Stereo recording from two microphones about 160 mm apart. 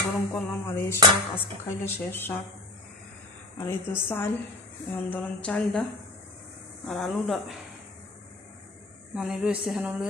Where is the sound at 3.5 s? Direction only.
15° left (ahead or behind).